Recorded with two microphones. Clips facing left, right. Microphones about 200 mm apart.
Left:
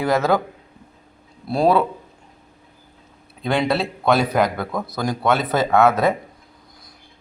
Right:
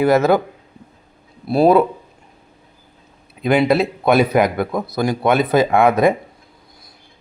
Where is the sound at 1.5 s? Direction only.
5° right (ahead or behind).